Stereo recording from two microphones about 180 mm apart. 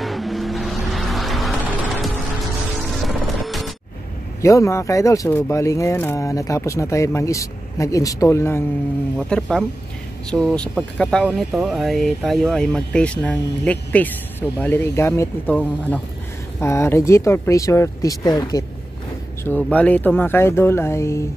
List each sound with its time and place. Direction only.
0.0 s vehicle: centre (ahead or behind)
2.9 s music: centre (ahead or behind)
4.4 s speech: 15° left (ahead or behind)
9.3 s speech: 5° left (ahead or behind); by 18.6 s 20° left (ahead or behind)
19.4 s speech: 10° left (ahead or behind)